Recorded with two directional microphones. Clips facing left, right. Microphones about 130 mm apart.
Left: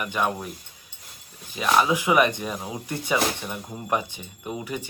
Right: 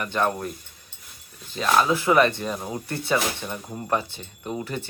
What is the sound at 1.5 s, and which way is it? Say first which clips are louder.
Speech: even; 10° left (ahead or behind).